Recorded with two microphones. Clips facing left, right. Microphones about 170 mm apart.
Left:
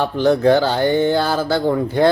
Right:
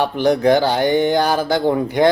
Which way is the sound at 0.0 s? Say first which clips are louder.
Left 1 dB; 15° right (ahead or behind).